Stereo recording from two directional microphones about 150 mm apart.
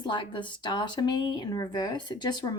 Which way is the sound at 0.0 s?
30° left (ahead or behind).